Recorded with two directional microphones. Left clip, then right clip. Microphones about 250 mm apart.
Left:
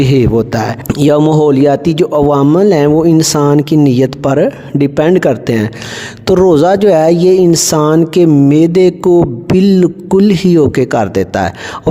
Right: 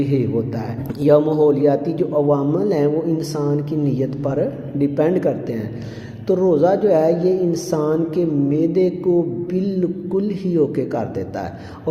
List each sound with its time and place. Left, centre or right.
0.0 s speech: left